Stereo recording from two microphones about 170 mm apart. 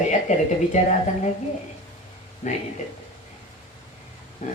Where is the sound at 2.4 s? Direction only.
40° left (ahead or behind).